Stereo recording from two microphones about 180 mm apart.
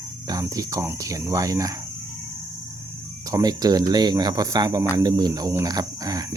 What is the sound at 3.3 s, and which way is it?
Speech, 20° right (ahead or behind).